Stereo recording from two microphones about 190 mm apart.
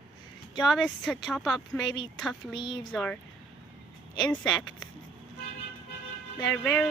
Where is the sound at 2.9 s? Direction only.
5° left (ahead or behind).